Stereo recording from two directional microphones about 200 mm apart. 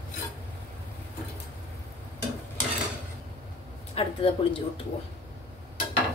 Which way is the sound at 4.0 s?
30° left (ahead or behind).